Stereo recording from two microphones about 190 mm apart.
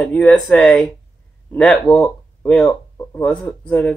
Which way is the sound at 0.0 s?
5° left (ahead or behind).